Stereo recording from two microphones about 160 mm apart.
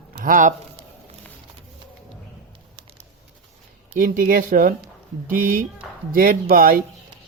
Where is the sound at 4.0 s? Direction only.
60° right (ahead or behind).